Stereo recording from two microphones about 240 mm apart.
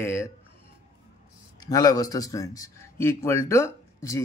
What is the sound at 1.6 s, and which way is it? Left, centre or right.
Speech, centre.